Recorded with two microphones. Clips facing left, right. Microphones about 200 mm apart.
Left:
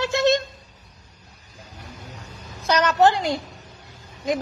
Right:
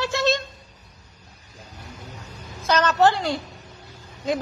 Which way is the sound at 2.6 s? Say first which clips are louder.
Left 1 dB; 15° left (ahead or behind).